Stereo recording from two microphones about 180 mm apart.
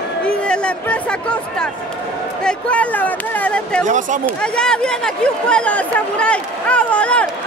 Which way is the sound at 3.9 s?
45° right (ahead or behind).